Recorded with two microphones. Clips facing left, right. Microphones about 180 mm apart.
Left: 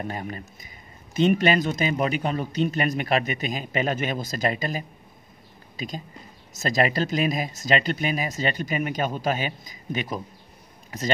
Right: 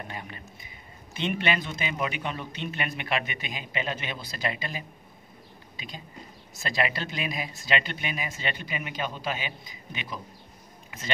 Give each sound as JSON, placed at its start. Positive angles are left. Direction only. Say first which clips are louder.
{"t": 0.1, "sound": "a man's voice", "louder": "left 7 dB", "side_deg": 40}